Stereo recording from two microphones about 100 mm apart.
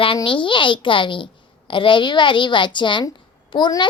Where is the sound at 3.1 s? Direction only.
55° left (ahead or behind).